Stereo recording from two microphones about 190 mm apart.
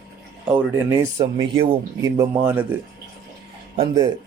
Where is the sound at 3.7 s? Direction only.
25° right (ahead or behind).